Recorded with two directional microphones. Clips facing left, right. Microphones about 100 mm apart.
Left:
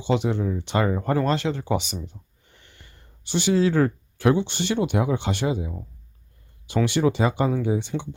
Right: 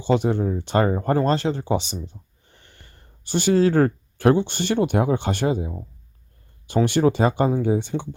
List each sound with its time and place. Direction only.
0.0 s speech: 45° right (ahead or behind)
6.8 s speech: 45° right (ahead or behind)